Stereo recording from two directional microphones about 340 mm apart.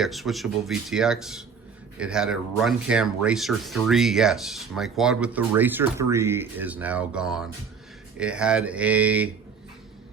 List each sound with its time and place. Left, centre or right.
0.0 s speech: centre